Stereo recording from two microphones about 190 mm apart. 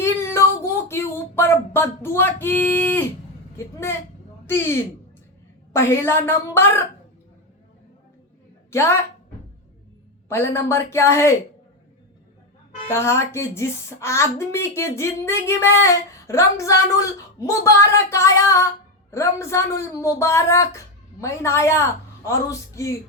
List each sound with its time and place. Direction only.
0.0 s a sound: 15° left (ahead or behind)
4.4 s speech: 10° left (ahead or behind)
8.7 s a woman's voice: 15° left (ahead or behind)
10.2 s speech: 15° left (ahead or behind)
12.9 s speech: 15° left (ahead or behind)